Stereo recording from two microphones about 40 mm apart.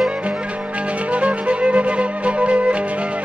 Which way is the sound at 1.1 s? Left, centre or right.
Right.